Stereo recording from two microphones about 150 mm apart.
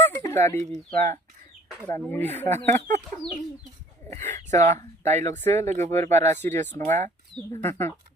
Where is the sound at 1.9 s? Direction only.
15° left (ahead or behind).